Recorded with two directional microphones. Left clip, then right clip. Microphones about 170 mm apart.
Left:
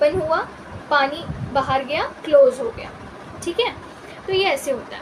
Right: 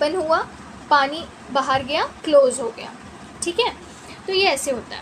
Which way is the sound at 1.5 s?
45° right (ahead or behind).